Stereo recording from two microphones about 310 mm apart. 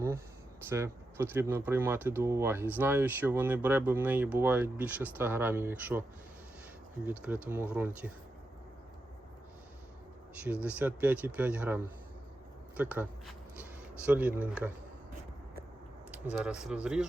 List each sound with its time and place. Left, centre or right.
0.7 s a man's voice: centre
10.3 s a man's voice: centre
16.1 s a man's voice: centre